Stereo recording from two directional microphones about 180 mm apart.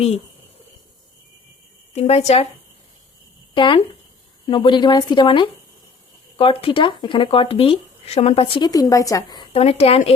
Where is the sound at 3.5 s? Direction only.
30° left (ahead or behind).